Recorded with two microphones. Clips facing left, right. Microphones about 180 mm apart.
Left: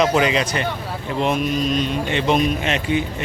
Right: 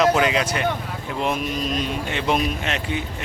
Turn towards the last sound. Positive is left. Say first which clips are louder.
# left 5 dB
turn(degrees=0)  # may be behind; listen again after turning